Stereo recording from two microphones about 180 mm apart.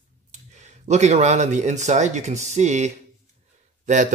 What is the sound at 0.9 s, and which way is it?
Speech, 40° right (ahead or behind).